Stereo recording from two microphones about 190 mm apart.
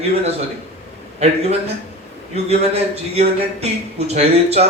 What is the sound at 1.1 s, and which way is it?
A man's voice, 35° right (ahead or behind).